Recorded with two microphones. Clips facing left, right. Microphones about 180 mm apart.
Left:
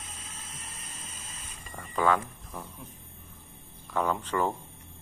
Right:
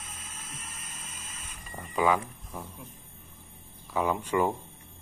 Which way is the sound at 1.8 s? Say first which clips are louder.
Even; 10° right (ahead or behind).